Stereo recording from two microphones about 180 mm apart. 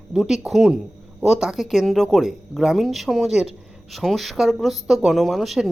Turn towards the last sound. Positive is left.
turn(degrees=0)  # may be behind; listen again after turning